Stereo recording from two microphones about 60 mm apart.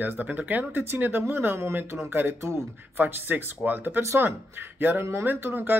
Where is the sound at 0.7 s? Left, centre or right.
Right.